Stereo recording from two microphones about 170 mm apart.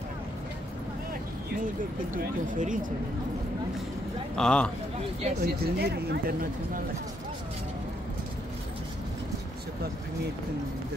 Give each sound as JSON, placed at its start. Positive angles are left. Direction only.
{"t": 2.4, "sound": "speech", "side_deg": -50}
{"t": 4.4, "sound": "speech", "side_deg": 5}
{"t": 5.4, "sound": "speech", "side_deg": -70}